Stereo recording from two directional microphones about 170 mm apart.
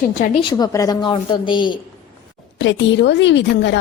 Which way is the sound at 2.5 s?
90° left.